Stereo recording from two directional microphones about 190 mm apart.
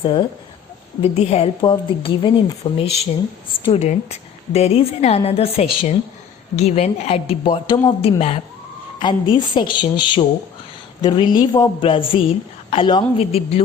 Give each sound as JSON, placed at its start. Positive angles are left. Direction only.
{"t": 0.0, "sound": "a woman's voice", "side_deg": 25}